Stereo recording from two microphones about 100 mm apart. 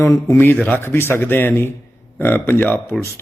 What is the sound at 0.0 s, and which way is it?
Speech, 30° left (ahead or behind).